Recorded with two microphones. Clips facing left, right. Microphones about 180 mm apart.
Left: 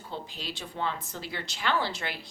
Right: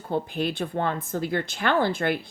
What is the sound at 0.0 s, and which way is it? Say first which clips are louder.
A woman's voice: right 12 dB; 55° right (ahead or behind).